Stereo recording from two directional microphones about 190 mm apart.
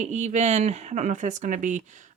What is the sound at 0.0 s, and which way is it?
Speech, 35° right (ahead or behind).